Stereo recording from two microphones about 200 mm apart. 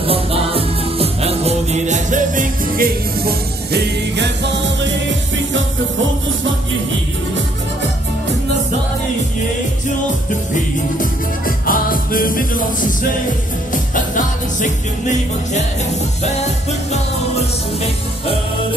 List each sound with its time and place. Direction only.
0.0 s music: 30° right (ahead or behind); by 4.3 s 55° right (ahead or behind)
10.5 s music: 45° left (ahead or behind)